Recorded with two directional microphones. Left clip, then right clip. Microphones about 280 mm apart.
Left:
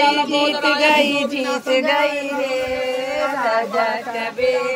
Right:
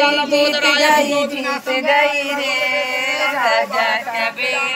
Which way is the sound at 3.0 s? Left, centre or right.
Left.